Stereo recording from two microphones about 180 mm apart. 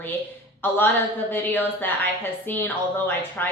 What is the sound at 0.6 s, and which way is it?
A woman's voice, 10° left (ahead or behind).